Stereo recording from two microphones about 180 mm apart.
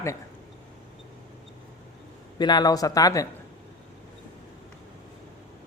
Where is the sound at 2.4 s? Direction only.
25° left (ahead or behind).